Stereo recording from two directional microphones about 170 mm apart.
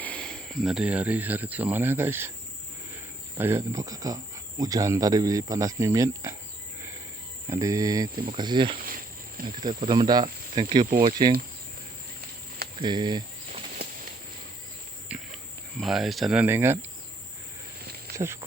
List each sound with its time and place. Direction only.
0.0 s speech: 5° left (ahead or behind); by 2.3 s 15° right (ahead or behind)
3.3 s speech: 15° right (ahead or behind)
7.5 s speech: 20° right (ahead or behind)
12.8 s speech: 25° right (ahead or behind)
15.1 s cricket: 5° right (ahead or behind)
15.8 s speech: centre (ahead or behind)